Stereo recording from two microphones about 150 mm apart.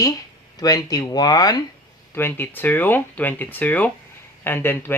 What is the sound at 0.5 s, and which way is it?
Speech, 25° left (ahead or behind).